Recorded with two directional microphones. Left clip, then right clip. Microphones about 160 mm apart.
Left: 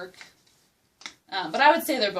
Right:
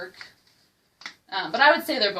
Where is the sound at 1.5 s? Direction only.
Centre (ahead or behind).